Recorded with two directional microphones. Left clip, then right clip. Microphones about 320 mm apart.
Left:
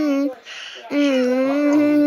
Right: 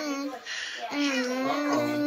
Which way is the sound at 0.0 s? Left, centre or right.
Left.